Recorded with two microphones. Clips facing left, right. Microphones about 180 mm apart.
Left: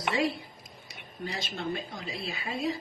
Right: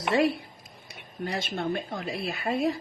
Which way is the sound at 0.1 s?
60° right (ahead or behind).